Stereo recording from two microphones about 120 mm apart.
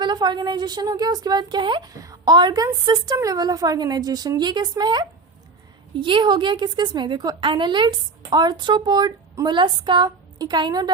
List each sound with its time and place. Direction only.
0.0 s a woman's voice: 40° right (ahead or behind)